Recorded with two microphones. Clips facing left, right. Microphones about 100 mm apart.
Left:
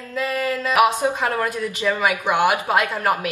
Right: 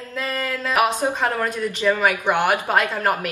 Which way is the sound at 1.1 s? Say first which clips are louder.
Even; 10° left (ahead or behind).